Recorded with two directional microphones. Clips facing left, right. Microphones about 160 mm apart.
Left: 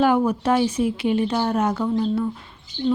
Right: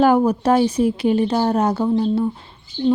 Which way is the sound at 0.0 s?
40° right (ahead or behind).